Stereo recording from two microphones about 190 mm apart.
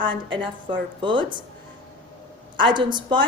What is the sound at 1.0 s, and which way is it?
Speech, 25° right (ahead or behind).